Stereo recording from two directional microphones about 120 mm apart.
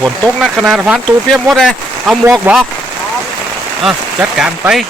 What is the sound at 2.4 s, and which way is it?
Speech, 15° right (ahead or behind).